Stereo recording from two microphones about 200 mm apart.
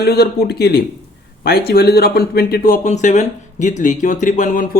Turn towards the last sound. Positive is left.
turn(degrees=40)  # may be behind; listen again after turning